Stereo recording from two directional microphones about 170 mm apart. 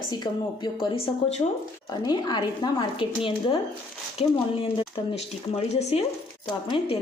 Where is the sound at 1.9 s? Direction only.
25° left (ahead or behind).